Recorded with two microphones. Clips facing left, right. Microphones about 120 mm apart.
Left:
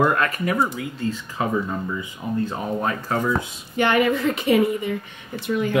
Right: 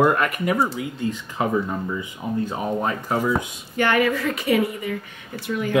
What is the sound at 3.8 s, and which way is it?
Speech, 20° left (ahead or behind).